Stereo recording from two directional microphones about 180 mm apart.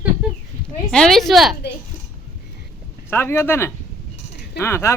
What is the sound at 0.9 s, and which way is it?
Speech, 5° left (ahead or behind).